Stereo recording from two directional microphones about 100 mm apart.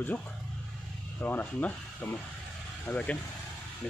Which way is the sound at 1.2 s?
15° left (ahead or behind).